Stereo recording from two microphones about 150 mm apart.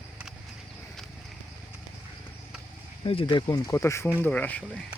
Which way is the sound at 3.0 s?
35° left (ahead or behind).